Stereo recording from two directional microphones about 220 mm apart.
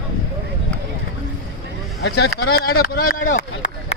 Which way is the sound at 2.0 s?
50° left (ahead or behind).